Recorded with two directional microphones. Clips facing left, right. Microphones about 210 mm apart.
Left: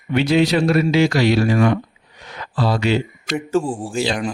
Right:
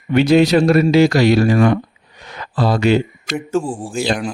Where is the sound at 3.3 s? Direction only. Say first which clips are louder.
Even; centre (ahead or behind).